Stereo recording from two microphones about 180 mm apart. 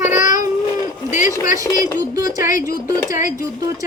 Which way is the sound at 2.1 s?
20° right (ahead or behind).